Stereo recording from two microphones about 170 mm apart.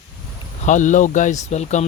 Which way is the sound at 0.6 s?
45° left (ahead or behind).